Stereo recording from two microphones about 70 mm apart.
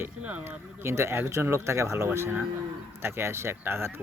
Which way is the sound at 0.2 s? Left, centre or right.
Centre.